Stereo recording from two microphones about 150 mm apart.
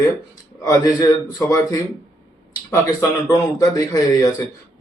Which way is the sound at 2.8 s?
20° left (ahead or behind).